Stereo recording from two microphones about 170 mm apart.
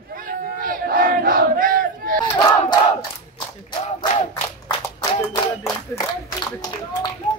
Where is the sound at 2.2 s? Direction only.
25° left (ahead or behind).